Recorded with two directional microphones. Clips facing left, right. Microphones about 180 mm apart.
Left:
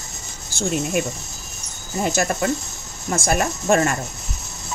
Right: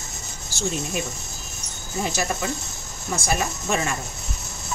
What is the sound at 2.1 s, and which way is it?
Speech, 55° left (ahead or behind).